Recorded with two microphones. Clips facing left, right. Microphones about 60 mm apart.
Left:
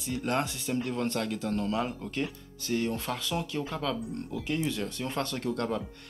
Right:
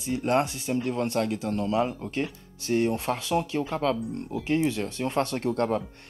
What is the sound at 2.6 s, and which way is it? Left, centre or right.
Speech, right.